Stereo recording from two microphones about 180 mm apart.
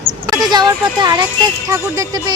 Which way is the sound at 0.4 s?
20° right (ahead or behind).